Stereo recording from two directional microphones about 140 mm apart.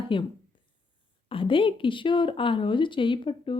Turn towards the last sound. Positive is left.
turn(degrees=35)  # may be behind; listen again after turning